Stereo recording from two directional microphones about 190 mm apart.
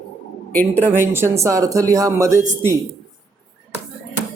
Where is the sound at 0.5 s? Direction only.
10° left (ahead or behind).